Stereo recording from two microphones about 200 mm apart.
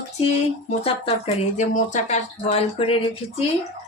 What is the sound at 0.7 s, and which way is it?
Speech, 30° left (ahead or behind).